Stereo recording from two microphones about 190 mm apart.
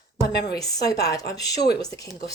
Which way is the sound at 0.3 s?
60° left (ahead or behind).